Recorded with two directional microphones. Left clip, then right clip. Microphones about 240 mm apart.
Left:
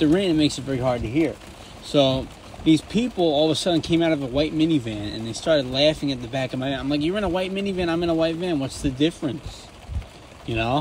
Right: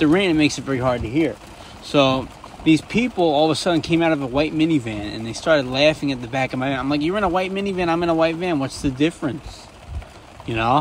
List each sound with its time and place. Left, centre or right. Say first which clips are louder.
0.0 s speech: right 3 dB; right
0.9 s speech: right 2 dB; centre
1.9 s speech: right 2 dB; right
4.6 s speech: right 2 dB; centre
5.4 s speech: right 3 dB; right
10.5 s speech: right 5 dB; right